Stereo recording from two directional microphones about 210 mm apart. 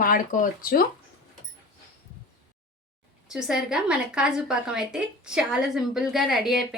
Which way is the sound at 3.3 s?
5° right (ahead or behind).